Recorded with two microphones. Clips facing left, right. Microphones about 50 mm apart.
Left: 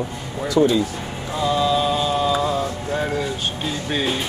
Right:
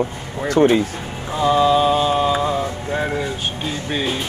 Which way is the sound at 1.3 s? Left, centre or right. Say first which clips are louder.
Right 4 dB; right.